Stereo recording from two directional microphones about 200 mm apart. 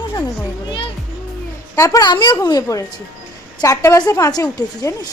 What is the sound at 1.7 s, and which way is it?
A woman's voice, 15° left (ahead or behind).